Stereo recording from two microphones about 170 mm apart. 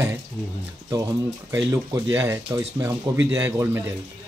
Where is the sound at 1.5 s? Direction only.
15° right (ahead or behind).